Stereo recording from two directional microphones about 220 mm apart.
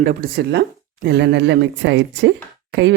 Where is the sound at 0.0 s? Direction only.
40° right (ahead or behind).